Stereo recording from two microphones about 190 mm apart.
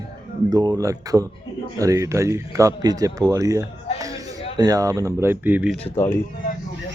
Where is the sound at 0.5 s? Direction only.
20° right (ahead or behind).